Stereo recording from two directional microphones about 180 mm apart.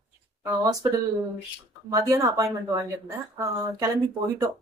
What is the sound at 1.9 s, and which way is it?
Speech, 20° right (ahead or behind).